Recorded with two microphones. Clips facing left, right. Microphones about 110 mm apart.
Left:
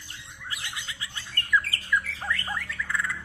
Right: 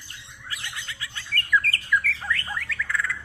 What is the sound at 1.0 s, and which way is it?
Bird, 20° left (ahead or behind).